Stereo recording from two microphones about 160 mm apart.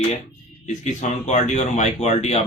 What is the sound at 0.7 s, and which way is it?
Speech, 45° left (ahead or behind).